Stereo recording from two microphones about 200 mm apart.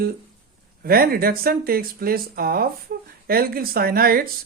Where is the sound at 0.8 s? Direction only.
50° right (ahead or behind).